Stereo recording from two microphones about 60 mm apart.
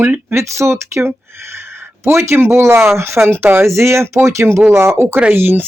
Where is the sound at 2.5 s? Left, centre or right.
Right.